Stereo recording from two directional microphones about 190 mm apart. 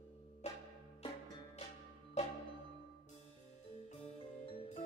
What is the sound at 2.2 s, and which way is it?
Music, 35° left (ahead or behind).